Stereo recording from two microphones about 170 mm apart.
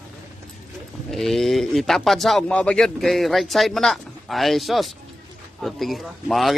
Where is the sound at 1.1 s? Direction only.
Centre (ahead or behind).